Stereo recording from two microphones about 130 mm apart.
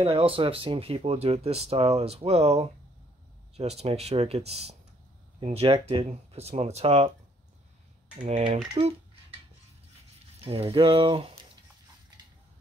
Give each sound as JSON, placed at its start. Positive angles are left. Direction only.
{"t": 0.0, "sound": "speech", "side_deg": -45}
{"t": 8.8, "sound": "speech", "side_deg": -50}
{"t": 10.4, "sound": "speech", "side_deg": -45}